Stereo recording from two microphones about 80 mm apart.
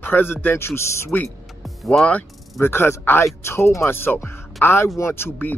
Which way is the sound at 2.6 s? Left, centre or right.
Left.